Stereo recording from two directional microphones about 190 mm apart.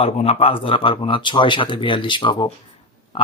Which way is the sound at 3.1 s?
25° left (ahead or behind).